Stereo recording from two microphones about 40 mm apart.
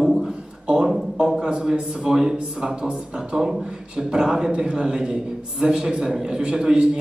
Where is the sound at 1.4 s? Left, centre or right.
Right.